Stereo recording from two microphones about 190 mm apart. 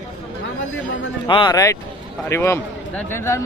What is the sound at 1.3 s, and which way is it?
A man's voice, 25° left (ahead or behind).